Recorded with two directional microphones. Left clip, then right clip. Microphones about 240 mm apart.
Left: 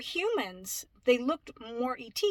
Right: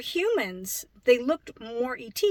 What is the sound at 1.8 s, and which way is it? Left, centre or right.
Speech, left.